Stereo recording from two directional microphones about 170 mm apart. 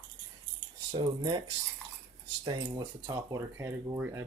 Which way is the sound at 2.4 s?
25° right (ahead or behind).